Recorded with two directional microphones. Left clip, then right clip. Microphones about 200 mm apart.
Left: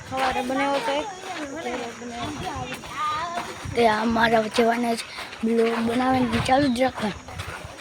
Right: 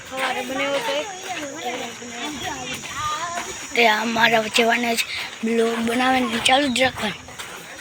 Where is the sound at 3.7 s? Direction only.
20° left (ahead or behind).